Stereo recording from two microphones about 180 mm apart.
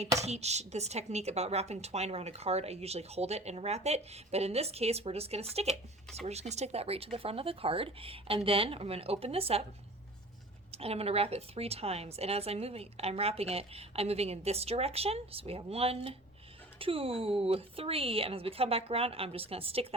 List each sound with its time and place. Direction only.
0.2 s speech: 35° right (ahead or behind)
10.7 s speech: 35° right (ahead or behind)